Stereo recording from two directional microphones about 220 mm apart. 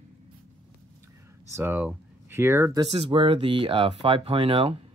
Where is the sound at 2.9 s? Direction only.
25° right (ahead or behind).